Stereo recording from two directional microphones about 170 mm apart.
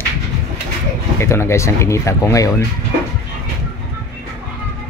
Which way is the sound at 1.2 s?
15° left (ahead or behind).